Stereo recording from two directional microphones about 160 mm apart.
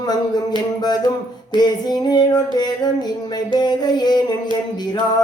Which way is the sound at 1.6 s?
25° left (ahead or behind).